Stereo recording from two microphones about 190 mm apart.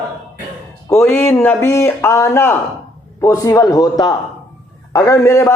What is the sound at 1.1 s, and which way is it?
A man's voice, 15° left (ahead or behind).